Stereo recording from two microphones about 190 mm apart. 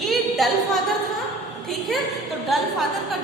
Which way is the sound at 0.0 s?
Centre (ahead or behind).